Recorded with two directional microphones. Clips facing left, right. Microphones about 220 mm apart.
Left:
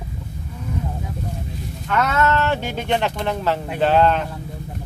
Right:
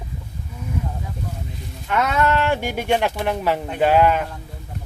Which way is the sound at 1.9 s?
10° right (ahead or behind).